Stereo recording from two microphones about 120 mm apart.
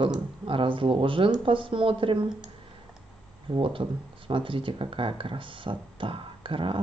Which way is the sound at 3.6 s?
45° right (ahead or behind).